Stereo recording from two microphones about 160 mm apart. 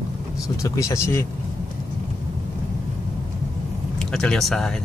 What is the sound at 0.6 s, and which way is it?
Speech, 20° left (ahead or behind).